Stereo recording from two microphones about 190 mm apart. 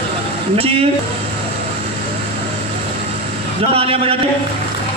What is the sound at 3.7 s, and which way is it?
Speech, 30° right (ahead or behind).